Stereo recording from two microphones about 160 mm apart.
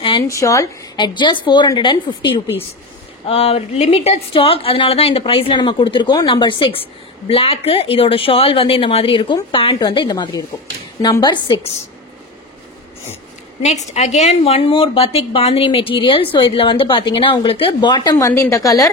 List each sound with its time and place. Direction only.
0.3 s a woman's voice: 20° left (ahead or behind)
13.7 s a woman's voice: 45° left (ahead or behind); by 18.9 s 20° left (ahead or behind)